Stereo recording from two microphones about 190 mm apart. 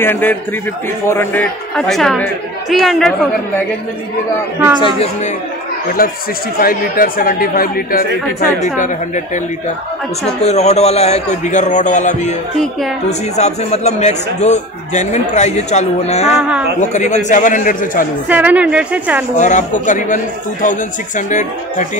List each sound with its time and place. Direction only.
0.0 s a man's voice: 10° left (ahead or behind)
4.7 s speech: 25° left (ahead or behind)
6.0 s speech: 50° left (ahead or behind)
10.4 s speech: 35° left (ahead or behind)
13.4 s speech: 35° left (ahead or behind)
16.3 s a woman's voice: 5° right (ahead or behind)
16.9 s speech: 40° left (ahead or behind)
18.3 s a woman's voice: 10° right (ahead or behind)
19.3 s speech: 40° left (ahead or behind)
21.3 s speech: 40° left (ahead or behind)